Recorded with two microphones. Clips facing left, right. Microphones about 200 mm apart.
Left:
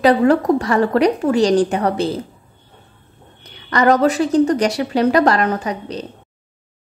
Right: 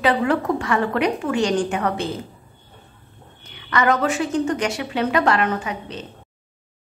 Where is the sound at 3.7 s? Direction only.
35° left (ahead or behind).